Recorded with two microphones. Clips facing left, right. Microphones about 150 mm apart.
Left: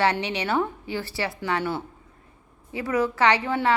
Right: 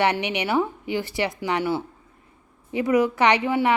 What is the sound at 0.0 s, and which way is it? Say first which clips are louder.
A woman's voice: right 1 dB; 15° right (ahead or behind).